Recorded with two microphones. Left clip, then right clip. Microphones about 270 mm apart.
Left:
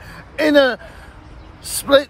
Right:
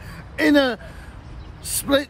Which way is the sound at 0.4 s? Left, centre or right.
Centre.